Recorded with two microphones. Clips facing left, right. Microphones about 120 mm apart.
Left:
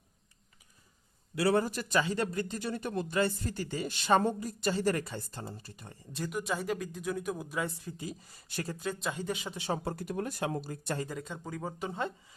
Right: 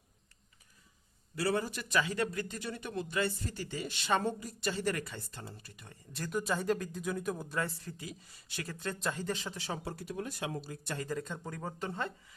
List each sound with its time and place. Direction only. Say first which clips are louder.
1.4 s speech: left 5 dB; 55° left (ahead or behind); by 6.0 s 35° left (ahead or behind)
6.3 s speech: right 2 dB; centre (ahead or behind)
8.0 s speech: left 5 dB; 40° left (ahead or behind)
8.8 s speech: right 1 dB; 5° left (ahead or behind)
9.7 s speech: left 5 dB; 50° left (ahead or behind)
11.1 s speech: right 1 dB; 10° left (ahead or behind)